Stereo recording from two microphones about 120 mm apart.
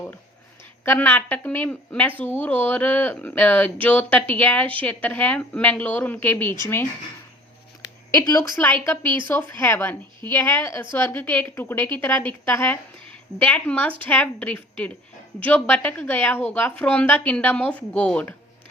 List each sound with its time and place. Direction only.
0.9 s a woman's voice: 15° left (ahead or behind)
8.1 s speech: 30° left (ahead or behind)
8.5 s a woman's voice: 15° left (ahead or behind)